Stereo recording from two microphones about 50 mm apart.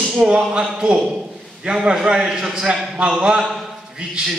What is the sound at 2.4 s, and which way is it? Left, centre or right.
A man's voice, centre.